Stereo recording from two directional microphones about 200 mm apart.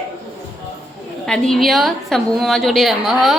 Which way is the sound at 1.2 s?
5° left (ahead or behind).